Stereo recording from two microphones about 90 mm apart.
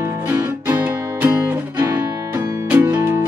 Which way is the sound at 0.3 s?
20° right (ahead or behind).